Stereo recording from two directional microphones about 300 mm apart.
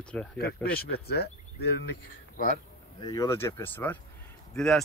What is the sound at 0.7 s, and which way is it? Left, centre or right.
Speech, left.